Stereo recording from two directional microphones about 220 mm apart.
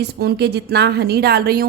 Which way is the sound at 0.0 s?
50° right (ahead or behind).